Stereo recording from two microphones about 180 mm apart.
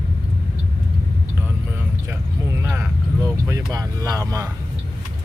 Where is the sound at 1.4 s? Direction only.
10° right (ahead or behind).